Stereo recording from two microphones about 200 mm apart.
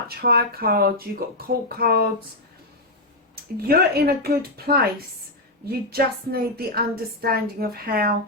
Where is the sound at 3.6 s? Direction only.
50° right (ahead or behind).